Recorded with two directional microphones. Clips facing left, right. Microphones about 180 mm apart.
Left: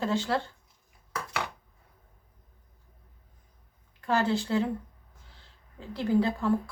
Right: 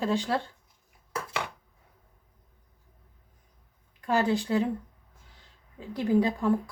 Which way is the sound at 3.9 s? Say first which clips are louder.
Right 1 dB; 15° right (ahead or behind).